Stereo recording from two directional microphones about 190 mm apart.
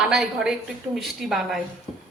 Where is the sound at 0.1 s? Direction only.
5° right (ahead or behind).